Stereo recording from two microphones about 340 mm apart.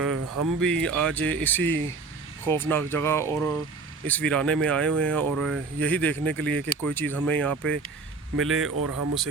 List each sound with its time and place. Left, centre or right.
0.0 s a sound: right
0.6 s speech: centre
8.4 s speech: right
8.8 s speech: right